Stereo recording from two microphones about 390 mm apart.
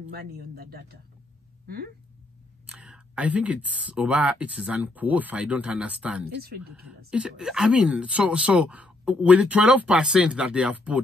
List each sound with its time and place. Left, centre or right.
0.1 s speech: right
2.6 s speech: centre